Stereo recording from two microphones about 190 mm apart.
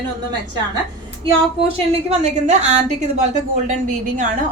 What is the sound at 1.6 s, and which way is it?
A woman's voice, 30° right (ahead or behind).